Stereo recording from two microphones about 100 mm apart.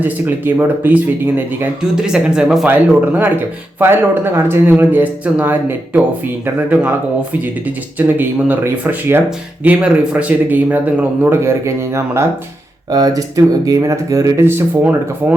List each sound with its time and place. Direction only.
0.0 s speech: 20° right (ahead or behind)
1.8 s speech: 5° right (ahead or behind)
2.6 s speech: 20° right (ahead or behind)
11.3 s speech: 25° right (ahead or behind)
12.9 s speech: 35° right (ahead or behind); by 15.4 s 20° right (ahead or behind)